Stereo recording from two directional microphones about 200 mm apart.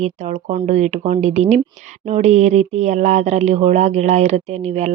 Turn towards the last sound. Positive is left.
turn(degrees=-35)  # may be behind; listen again after turning